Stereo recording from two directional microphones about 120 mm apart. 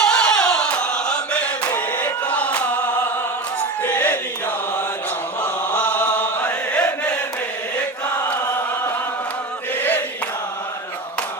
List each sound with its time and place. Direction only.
0.0 s chant: 5° left (ahead or behind)
3.8 s a sound: 15° left (ahead or behind)
5.4 s chant: 10° left (ahead or behind)
8.3 s chant: 20° left (ahead or behind)